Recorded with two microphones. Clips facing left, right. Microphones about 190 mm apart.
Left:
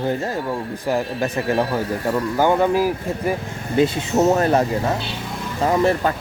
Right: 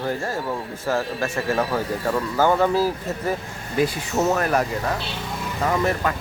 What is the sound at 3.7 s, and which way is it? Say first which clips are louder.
Speech: left 4 dB; 25° left (ahead or behind).